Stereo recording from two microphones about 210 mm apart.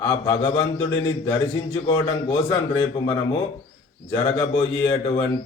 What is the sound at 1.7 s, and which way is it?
A man's voice, 25° left (ahead or behind).